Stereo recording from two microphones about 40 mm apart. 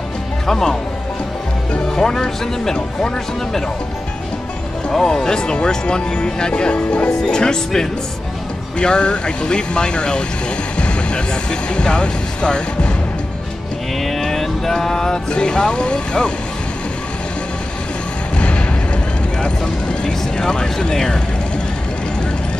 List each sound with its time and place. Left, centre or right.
0.5 s speech: centre
2.0 s speech: centre
4.9 s speech: centre
10.8 s music: left
11.7 s speech: left
14.0 s music: centre
15.3 s speech: left
19.4 s speech: left